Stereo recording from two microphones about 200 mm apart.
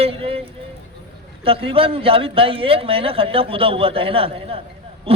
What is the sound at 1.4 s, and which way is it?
A man's voice, 30° right (ahead or behind).